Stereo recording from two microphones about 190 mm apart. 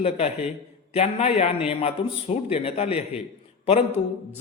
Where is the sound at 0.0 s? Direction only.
35° left (ahead or behind).